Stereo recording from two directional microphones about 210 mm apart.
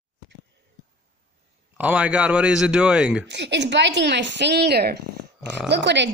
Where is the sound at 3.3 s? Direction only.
55° right (ahead or behind).